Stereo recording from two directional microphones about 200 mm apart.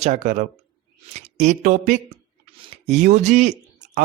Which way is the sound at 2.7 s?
35° right (ahead or behind).